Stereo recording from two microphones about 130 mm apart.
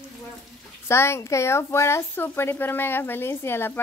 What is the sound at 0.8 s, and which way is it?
Speech, 20° left (ahead or behind).